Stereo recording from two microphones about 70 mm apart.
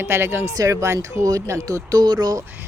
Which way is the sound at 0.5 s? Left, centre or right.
Right.